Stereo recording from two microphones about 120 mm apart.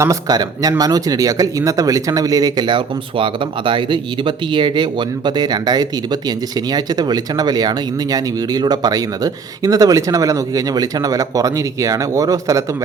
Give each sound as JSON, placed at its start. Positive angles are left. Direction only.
{"t": 0.0, "sound": "speech", "side_deg": -30}